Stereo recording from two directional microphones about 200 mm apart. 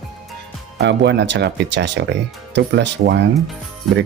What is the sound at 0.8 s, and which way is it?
Speech, 60° right (ahead or behind).